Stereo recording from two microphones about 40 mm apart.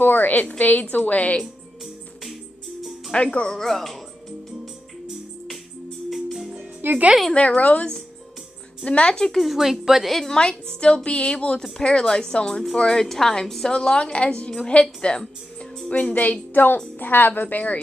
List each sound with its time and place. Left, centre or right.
0.0 s a woman's voice: left
3.1 s speech: left
3.5 s speech: centre
6.8 s speech: right
7.3 s a woman's voice: left
9.0 s a woman's voice: centre
9.4 s speech: centre
10.4 s speech: left
13.0 s a woman's voice: centre
13.7 s a woman's voice: left
15.9 s a woman's voice: left